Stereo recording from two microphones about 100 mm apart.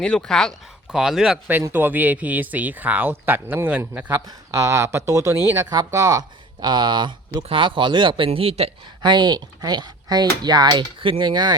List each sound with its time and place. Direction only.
0.0 s speech: 10° left (ahead or behind)
0.9 s speech: 5° right (ahead or behind)
1.7 s speech: 20° right (ahead or behind)
4.3 s speech: 30° right (ahead or behind); by 8.7 s 85° right
9.0 s speech: 45° right (ahead or behind)